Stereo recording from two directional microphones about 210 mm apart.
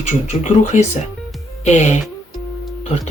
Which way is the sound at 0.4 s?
35° left (ahead or behind).